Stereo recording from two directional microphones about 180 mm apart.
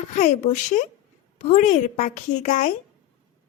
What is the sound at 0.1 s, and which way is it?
Speech, 40° left (ahead or behind).